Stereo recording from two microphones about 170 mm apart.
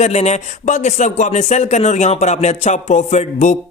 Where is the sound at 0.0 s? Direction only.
40° left (ahead or behind).